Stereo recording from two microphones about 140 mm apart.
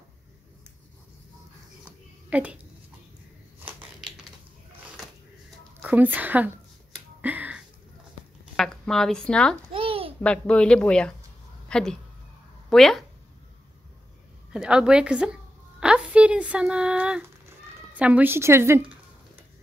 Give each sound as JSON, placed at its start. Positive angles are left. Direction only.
{"t": 2.2, "sound": "a woman's voice", "side_deg": -10}
{"t": 5.8, "sound": "speech", "side_deg": -10}
{"t": 7.2, "sound": "finger snapping", "side_deg": -10}
{"t": 8.5, "sound": "speech", "side_deg": 5}
{"t": 9.7, "sound": "a sound", "side_deg": -40}
{"t": 10.2, "sound": "speech", "side_deg": 5}
{"t": 14.5, "sound": "a woman's voice", "side_deg": -5}